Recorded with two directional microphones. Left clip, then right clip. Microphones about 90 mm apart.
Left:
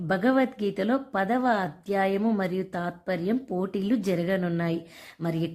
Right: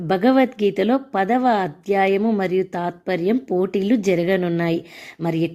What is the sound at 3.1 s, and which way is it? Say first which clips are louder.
Speech: right 8 dB; 45° right (ahead or behind).